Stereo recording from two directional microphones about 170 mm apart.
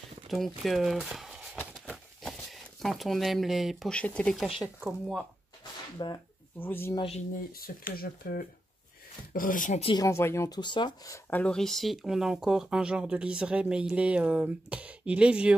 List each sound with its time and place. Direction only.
0.3 s speech: centre (ahead or behind)
1.6 s a sound: centre (ahead or behind)
4.8 s speech: centre (ahead or behind)
6.0 s speech: 25° left (ahead or behind)
6.6 s speech: 10° left (ahead or behind)
7.5 s speech: 60° left (ahead or behind)
9.8 s speech: 20° left (ahead or behind)
11.2 s speech: 10° left (ahead or behind)